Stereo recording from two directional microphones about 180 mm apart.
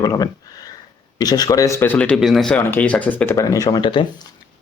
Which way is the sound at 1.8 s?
10° left (ahead or behind).